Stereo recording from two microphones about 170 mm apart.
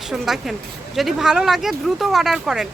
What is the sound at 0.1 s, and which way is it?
Speech, centre (ahead or behind).